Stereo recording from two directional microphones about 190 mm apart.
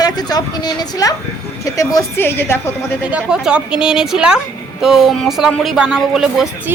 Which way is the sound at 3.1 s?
5° right (ahead or behind).